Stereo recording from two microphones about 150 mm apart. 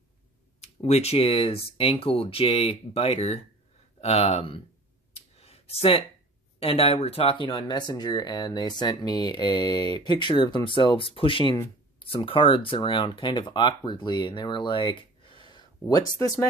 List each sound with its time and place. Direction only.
0.8 s speech: 45° left (ahead or behind)
5.4 s a sound: 40° left (ahead or behind)
6.6 s speech: 40° left (ahead or behind)